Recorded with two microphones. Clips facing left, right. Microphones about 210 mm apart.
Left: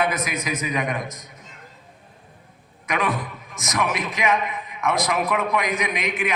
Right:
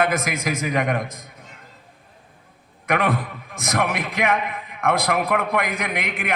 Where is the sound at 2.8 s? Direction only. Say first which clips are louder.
Right 3 dB; 60° right (ahead or behind).